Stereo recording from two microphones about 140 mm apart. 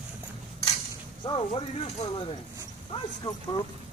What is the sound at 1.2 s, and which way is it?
Speech, 35° left (ahead or behind).